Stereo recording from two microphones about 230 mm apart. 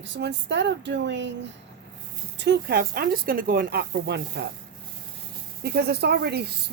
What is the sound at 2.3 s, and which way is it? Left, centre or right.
Speech, right.